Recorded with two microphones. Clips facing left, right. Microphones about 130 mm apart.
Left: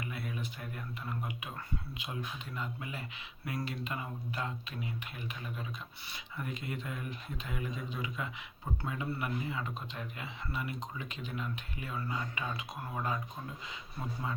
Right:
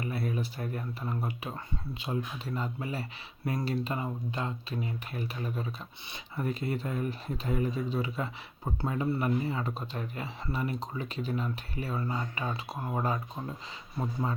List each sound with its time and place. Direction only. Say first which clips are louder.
0.0 s speech: right 7 dB; 35° right (ahead or behind)
2.6 s speech: right 6 dB; 35° right (ahead or behind)